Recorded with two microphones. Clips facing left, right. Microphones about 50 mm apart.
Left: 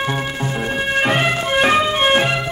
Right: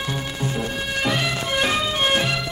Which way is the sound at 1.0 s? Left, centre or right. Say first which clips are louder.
Left 5 dB; left.